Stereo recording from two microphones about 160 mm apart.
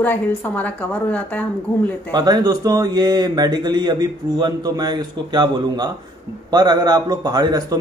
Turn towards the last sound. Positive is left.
turn(degrees=-25)  # may be behind; listen again after turning